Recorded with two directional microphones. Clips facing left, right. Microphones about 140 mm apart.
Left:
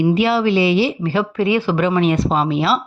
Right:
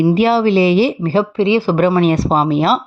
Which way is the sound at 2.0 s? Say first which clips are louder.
Right 3 dB; 40° right (ahead or behind).